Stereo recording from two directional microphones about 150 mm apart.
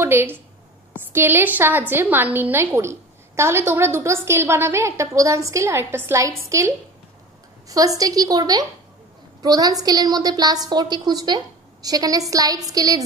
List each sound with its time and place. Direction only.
0.0 s a woman's voice: 15° right (ahead or behind)
7.6 s a woman's voice: 25° right (ahead or behind)